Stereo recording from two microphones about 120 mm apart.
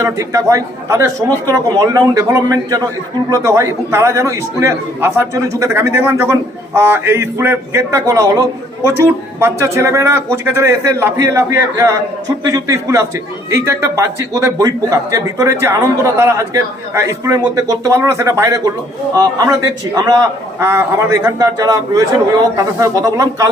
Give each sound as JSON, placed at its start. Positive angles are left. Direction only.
{"t": 0.0, "sound": "a man's voice", "side_deg": -25}